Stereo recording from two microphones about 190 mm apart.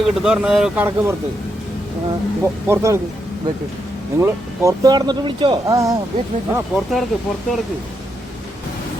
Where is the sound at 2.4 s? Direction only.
15° right (ahead or behind).